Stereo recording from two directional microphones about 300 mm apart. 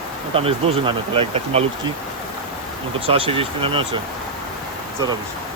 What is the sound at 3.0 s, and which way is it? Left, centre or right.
Speech, centre.